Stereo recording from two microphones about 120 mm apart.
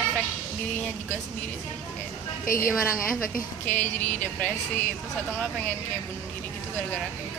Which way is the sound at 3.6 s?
15° left (ahead or behind).